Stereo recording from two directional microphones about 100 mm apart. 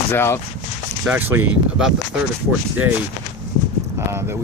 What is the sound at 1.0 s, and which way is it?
Speech, 15° right (ahead or behind).